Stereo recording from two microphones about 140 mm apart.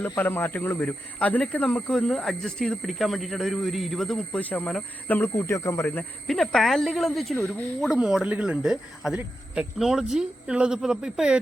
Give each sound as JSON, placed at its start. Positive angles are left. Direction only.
{"t": 0.2, "sound": "speech", "side_deg": 15}
{"t": 6.2, "sound": "speech", "side_deg": 0}
{"t": 7.3, "sound": "speech", "side_deg": 15}
{"t": 7.8, "sound": "speech", "side_deg": -5}